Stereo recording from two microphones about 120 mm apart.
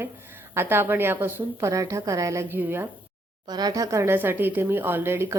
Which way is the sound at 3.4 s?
35° right (ahead or behind).